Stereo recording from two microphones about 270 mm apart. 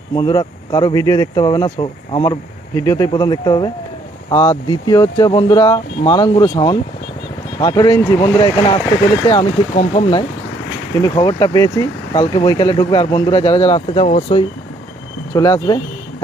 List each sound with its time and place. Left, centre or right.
0.2 s speech: centre
15.3 s speech: centre